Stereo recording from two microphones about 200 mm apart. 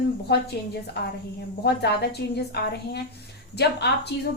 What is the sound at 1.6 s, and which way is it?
A woman's voice, 55° left (ahead or behind).